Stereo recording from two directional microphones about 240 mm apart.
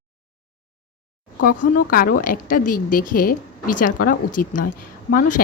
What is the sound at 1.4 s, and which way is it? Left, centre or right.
Speech, left.